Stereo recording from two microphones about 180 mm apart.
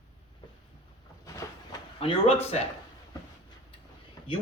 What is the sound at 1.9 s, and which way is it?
Speech, 30° left (ahead or behind).